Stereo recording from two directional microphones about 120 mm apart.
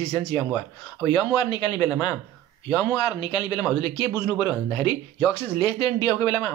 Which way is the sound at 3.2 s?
40° left (ahead or behind).